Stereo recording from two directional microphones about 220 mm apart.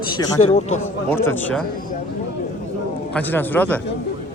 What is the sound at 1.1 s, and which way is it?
Speech, 10° left (ahead or behind).